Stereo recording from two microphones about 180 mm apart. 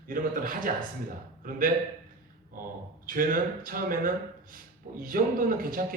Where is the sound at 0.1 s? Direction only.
50° right (ahead or behind).